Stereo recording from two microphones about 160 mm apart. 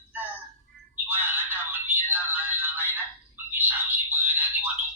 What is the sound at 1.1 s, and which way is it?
Music, 10° right (ahead or behind).